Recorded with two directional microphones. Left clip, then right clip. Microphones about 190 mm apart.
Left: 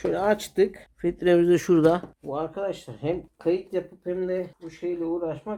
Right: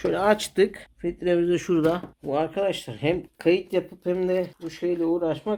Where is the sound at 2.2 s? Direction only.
35° right (ahead or behind).